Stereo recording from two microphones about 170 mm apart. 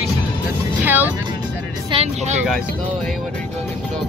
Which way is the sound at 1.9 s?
40° right (ahead or behind).